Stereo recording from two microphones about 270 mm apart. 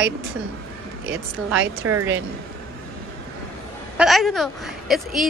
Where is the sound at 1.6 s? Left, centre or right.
Right.